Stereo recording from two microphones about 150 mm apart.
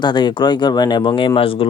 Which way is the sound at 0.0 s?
30° left (ahead or behind).